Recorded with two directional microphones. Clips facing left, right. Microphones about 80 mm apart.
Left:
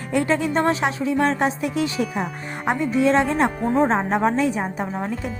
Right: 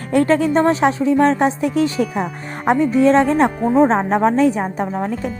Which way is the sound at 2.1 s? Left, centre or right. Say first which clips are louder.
Right 4 dB; centre.